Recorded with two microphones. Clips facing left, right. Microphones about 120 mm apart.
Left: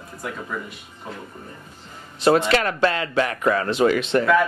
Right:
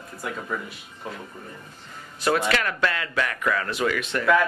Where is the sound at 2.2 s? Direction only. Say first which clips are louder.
Left 5 dB; 25° left (ahead or behind).